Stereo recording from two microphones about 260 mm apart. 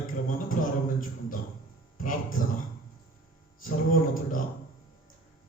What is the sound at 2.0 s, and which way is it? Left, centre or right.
Speech, left.